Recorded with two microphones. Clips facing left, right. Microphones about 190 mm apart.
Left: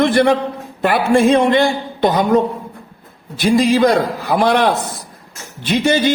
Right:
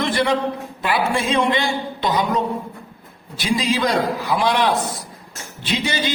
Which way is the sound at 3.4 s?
50° left (ahead or behind).